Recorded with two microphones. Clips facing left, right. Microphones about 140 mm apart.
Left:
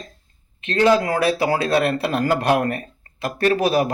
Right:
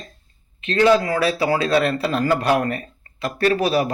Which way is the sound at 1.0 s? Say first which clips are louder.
Left 1 dB; 55° left (ahead or behind).